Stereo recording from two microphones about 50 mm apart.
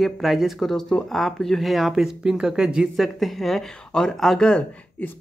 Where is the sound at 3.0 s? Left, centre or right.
Centre.